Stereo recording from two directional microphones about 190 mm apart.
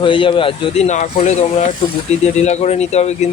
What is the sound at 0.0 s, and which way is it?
Speech, 25° left (ahead or behind).